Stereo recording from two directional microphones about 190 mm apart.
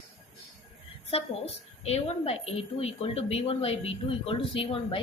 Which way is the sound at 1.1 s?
30° left (ahead or behind).